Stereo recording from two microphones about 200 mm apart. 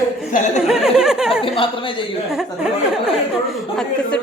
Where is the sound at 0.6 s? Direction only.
5° right (ahead or behind).